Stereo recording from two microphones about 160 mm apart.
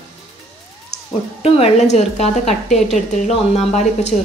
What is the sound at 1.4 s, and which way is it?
A woman's voice, 40° left (ahead or behind).